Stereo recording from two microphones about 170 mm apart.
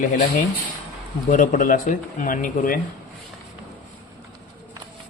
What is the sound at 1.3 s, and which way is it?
Speech, 50° left (ahead or behind).